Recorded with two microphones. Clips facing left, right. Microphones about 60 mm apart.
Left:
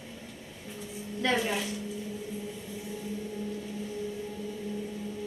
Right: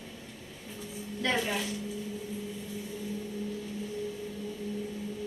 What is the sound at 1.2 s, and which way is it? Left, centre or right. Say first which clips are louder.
Speech: left 2 dB; centre.